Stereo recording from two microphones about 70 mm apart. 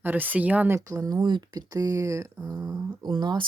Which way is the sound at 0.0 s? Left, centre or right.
Right.